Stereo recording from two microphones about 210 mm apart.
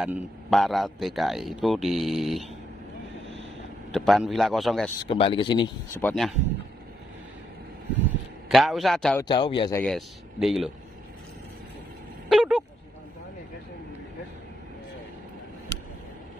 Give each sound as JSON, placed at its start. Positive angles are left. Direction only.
{"t": 0.0, "sound": "a man's voice", "side_deg": 0}
{"t": 3.9, "sound": "a man's voice", "side_deg": 0}
{"t": 5.0, "sound": "speech", "side_deg": 25}
{"t": 5.9, "sound": "a man's voice", "side_deg": 5}
{"t": 8.5, "sound": "a man's voice", "side_deg": 0}
{"t": 9.2, "sound": "speech", "side_deg": 20}
{"t": 9.8, "sound": "a man's voice", "side_deg": 0}
{"t": 12.3, "sound": "honk", "side_deg": -5}